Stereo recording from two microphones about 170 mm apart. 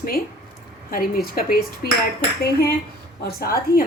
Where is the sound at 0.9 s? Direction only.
55° left (ahead or behind).